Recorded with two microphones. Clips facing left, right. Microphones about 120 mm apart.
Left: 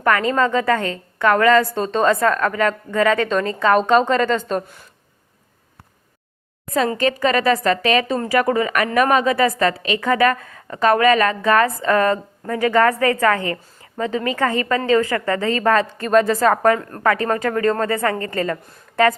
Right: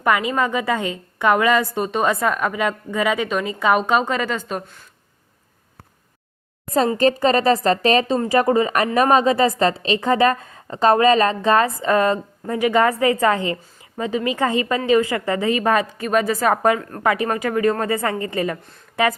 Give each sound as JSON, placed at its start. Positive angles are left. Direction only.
{"t": 0.0, "sound": "a woman's voice", "side_deg": -15}
{"t": 6.7, "sound": "a woman's voice", "side_deg": -35}